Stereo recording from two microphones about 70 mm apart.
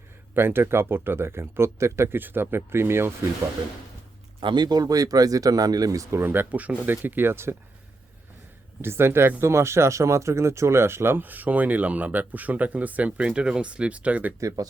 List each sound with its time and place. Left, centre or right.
0.3 s speech: right
2.1 s speech: right
4.4 s speech: right
8.8 s speech: right
14.4 s speech: right